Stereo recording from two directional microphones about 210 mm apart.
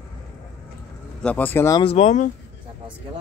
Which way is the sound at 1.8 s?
30° left (ahead or behind).